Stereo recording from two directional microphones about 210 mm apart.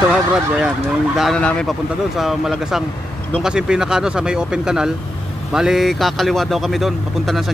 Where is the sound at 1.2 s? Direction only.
5° left (ahead or behind).